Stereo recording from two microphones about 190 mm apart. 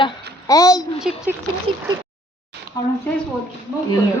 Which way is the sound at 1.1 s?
5° right (ahead or behind).